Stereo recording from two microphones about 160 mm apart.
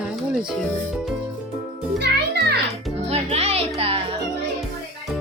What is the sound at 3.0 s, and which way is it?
Music, 40° right (ahead or behind).